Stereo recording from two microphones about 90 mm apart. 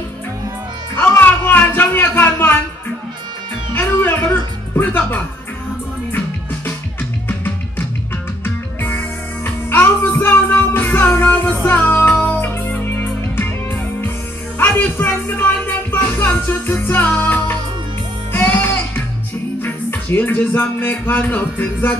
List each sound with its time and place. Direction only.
0.9 s music: 20° left (ahead or behind)
3.7 s music: 25° left (ahead or behind)
8.8 s music: 20° left (ahead or behind)